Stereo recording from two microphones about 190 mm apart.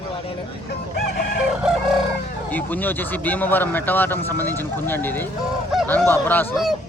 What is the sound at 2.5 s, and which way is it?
Speech, 10° left (ahead or behind).